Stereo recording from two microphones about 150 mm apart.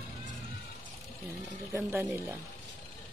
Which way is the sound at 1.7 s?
15° right (ahead or behind).